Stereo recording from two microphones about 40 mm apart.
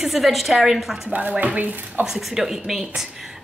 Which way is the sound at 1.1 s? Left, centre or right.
Right.